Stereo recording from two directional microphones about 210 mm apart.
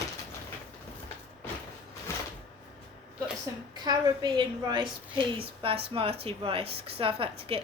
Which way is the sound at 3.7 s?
20° right (ahead or behind).